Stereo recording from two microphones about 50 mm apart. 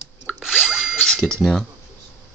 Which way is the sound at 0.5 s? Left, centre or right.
Centre.